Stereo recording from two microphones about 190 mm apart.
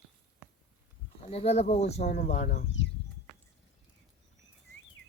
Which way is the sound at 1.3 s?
35° left (ahead or behind).